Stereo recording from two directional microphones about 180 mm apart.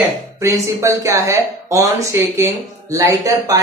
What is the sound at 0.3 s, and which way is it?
Speech, 15° right (ahead or behind).